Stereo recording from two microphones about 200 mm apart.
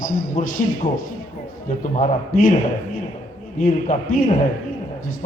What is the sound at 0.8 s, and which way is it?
Speech, 25° left (ahead or behind).